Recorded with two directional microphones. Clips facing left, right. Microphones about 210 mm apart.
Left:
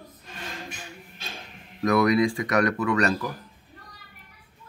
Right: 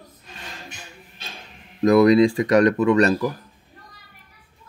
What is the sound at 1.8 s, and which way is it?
Speech, 25° right (ahead or behind).